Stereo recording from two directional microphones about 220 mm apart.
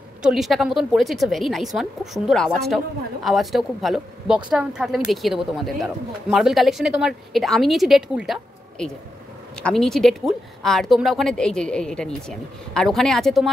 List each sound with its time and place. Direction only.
0.2 s a woman's voice: centre (ahead or behind)